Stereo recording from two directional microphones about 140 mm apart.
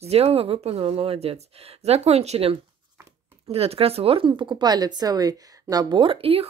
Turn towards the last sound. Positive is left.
turn(degrees=-40)  # may be behind; listen again after turning